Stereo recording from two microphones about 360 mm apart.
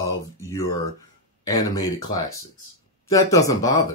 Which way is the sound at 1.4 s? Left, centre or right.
Centre.